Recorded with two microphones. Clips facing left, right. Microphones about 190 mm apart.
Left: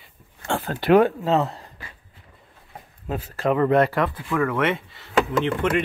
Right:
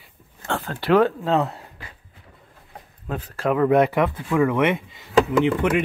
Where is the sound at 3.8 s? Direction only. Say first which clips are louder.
Right 2 dB; 15° right (ahead or behind).